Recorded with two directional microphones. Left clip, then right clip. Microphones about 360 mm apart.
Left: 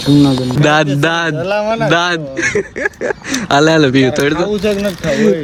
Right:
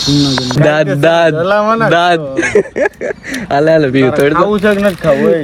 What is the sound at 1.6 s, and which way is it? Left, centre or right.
Speech, right.